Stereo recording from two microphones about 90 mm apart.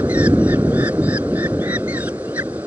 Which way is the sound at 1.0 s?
15° right (ahead or behind).